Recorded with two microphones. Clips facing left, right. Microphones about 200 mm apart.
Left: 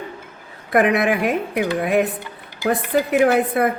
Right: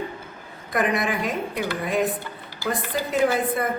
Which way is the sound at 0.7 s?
65° left (ahead or behind).